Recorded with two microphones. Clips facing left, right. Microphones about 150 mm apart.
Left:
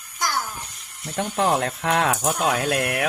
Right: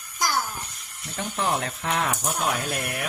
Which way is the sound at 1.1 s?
55° left (ahead or behind).